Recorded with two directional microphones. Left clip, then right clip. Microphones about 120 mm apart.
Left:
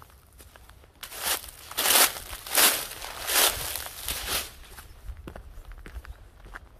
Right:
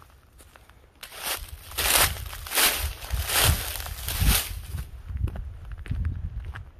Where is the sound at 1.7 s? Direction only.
35° left (ahead or behind).